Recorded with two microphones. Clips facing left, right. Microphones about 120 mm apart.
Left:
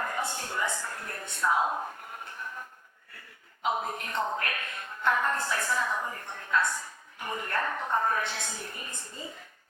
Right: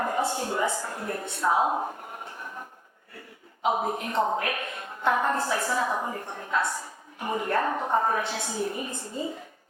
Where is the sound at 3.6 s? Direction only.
20° right (ahead or behind).